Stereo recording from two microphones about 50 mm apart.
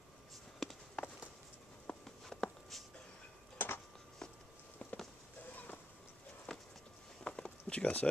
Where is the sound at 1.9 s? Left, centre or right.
Centre.